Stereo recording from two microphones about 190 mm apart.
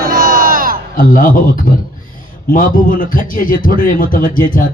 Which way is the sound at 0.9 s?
45° left (ahead or behind).